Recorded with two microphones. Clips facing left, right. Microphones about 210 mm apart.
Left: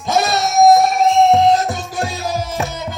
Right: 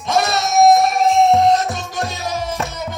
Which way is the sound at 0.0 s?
Centre (ahead or behind).